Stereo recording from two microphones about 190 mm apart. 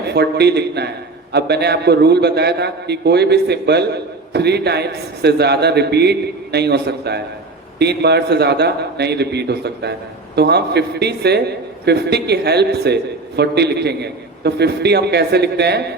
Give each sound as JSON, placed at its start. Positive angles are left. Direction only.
{"t": 0.1, "sound": "a man's voice", "side_deg": -60}